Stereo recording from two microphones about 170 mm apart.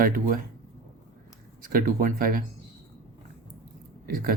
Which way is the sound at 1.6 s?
55° right (ahead or behind).